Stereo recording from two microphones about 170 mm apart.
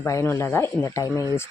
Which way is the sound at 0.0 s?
15° left (ahead or behind).